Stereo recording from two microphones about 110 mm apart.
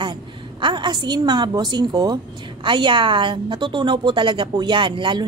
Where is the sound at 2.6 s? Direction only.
50° right (ahead or behind).